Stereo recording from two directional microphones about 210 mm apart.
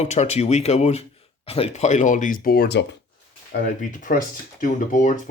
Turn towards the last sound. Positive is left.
turn(degrees=40)  # may be behind; listen again after turning